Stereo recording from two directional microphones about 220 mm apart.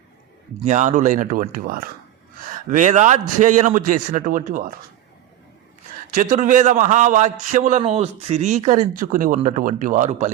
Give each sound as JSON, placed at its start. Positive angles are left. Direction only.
{"t": 0.6, "sound": "a man's voice", "side_deg": -30}
{"t": 6.1, "sound": "a man's voice", "side_deg": -35}